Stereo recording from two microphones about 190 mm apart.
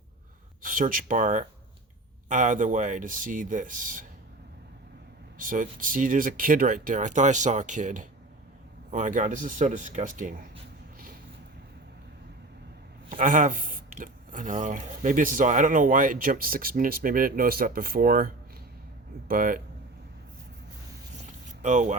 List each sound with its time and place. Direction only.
0.6 s a man's voice: 45° right (ahead or behind)
5.4 s a man's voice: 45° right (ahead or behind)
13.1 s a man's voice: 45° right (ahead or behind)
19.3 s a man's voice: 45° right (ahead or behind)
21.6 s speech: 40° right (ahead or behind)